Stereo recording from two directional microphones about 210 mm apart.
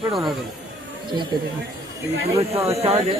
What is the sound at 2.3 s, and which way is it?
Speech, 30° right (ahead or behind).